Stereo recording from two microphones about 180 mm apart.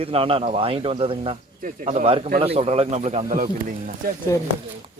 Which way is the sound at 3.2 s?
50° right (ahead or behind).